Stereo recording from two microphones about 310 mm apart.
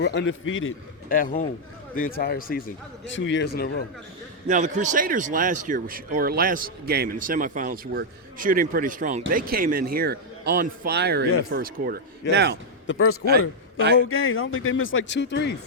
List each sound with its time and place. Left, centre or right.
0.0 s speech: left
1.1 s speech: left
4.4 s a man's voice: right
12.9 s a man's voice: left